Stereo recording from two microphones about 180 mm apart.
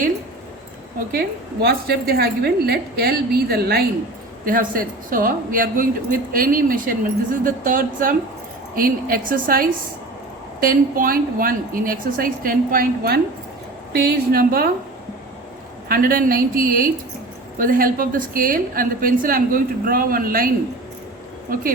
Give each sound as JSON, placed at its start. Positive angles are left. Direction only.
{"t": 1.6, "sound": "a woman's voice", "side_deg": -60}
{"t": 4.4, "sound": "a woman's voice", "side_deg": -50}
{"t": 15.9, "sound": "speech", "side_deg": -55}